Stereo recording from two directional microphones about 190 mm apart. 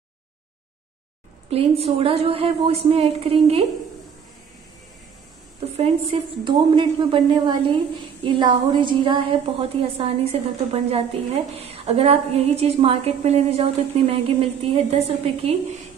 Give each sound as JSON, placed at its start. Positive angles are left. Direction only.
{"t": 1.5, "sound": "a woman's voice", "side_deg": -30}
{"t": 5.8, "sound": "a woman's voice", "side_deg": -30}